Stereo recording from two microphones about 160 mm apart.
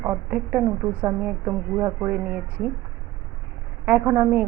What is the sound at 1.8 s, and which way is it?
Speech, 20° right (ahead or behind).